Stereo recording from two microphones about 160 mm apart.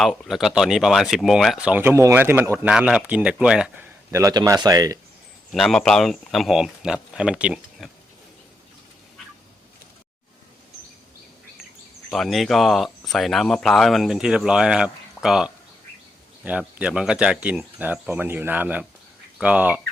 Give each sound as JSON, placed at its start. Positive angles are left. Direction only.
{"t": 0.0, "sound": "speech", "side_deg": 0}
{"t": 4.1, "sound": "speech", "side_deg": -20}
{"t": 5.5, "sound": "speech", "side_deg": 5}
{"t": 12.1, "sound": "speech", "side_deg": 0}